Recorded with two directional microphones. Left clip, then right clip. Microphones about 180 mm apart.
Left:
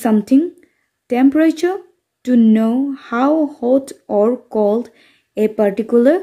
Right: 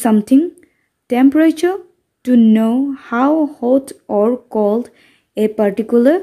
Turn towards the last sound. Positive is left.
turn(degrees=-15)  # may be behind; listen again after turning